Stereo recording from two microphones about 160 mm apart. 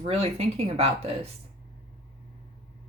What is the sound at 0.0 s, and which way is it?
Speech, 40° right (ahead or behind).